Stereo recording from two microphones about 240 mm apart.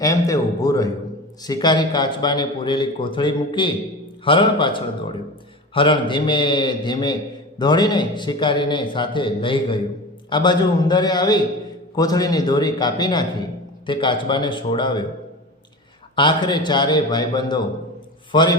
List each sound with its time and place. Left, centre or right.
0.0 s a man's voice: centre
16.1 s a man's voice: centre